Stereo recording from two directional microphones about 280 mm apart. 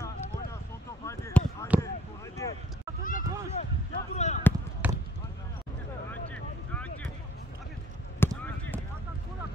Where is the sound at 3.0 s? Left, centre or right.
Left.